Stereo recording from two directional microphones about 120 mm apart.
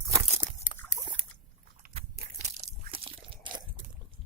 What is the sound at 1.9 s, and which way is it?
Biting, 75° right (ahead or behind).